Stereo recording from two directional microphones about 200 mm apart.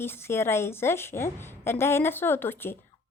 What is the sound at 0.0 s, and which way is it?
Speech, 10° left (ahead or behind).